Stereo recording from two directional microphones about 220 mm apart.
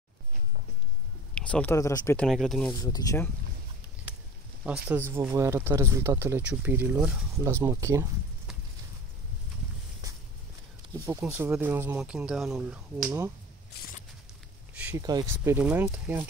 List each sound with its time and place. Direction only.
1.3 s speech: 5° left (ahead or behind)
2.2 s speech: centre (ahead or behind)
2.7 s speech: 15° left (ahead or behind)
4.6 s speech: 10° right (ahead or behind)
10.0 s walk: 15° right (ahead or behind)
11.1 s speech: 10° right (ahead or behind)
14.7 s a sound: 5° right (ahead or behind)
15.0 s speech: 15° right (ahead or behind)